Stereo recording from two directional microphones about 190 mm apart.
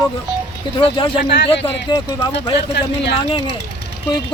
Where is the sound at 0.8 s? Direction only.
25° left (ahead or behind).